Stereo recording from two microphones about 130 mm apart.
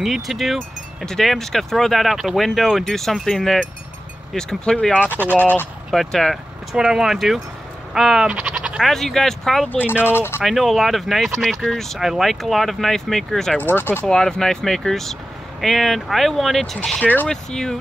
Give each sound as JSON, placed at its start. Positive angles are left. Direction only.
{"t": 0.0, "sound": "speech", "side_deg": 0}
{"t": 9.8, "sound": "speech", "side_deg": 15}
{"t": 10.4, "sound": "speech", "side_deg": 0}
{"t": 13.6, "sound": "speech", "side_deg": 15}
{"t": 14.0, "sound": "speech", "side_deg": 5}